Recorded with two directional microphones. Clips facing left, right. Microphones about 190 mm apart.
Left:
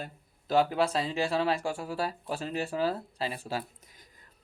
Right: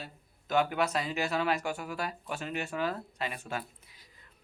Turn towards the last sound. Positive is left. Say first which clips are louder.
# left 2 dB
turn(degrees=45)  # may be behind; listen again after turning